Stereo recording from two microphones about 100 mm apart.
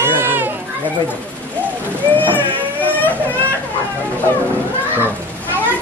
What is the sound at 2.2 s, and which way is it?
Baby cry, 20° left (ahead or behind).